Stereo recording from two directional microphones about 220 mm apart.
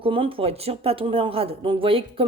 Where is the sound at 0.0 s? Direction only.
25° right (ahead or behind).